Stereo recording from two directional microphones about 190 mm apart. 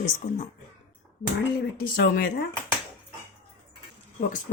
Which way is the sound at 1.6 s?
55° left (ahead or behind).